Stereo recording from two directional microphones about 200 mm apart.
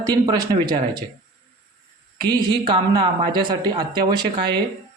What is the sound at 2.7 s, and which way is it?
A man's voice, 20° right (ahead or behind).